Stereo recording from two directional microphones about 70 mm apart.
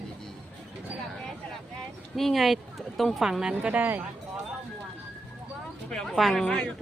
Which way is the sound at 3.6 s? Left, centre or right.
Right.